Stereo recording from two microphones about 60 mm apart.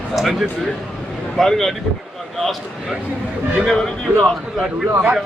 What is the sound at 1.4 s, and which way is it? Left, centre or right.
Speech, centre.